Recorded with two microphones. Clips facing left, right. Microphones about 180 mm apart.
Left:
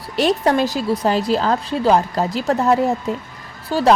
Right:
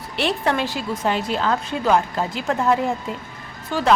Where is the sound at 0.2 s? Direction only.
40° left (ahead or behind).